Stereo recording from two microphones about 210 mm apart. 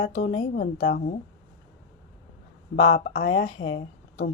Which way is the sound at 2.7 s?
40° left (ahead or behind).